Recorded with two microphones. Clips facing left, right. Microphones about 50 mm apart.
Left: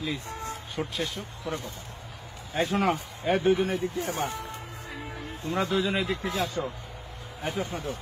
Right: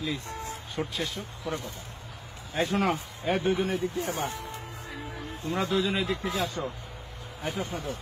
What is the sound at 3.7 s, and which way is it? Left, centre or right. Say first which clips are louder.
Speech: even; left.